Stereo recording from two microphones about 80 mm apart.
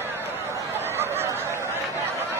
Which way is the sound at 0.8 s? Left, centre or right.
Right.